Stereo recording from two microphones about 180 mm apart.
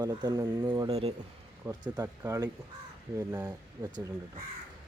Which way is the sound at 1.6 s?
20° right (ahead or behind).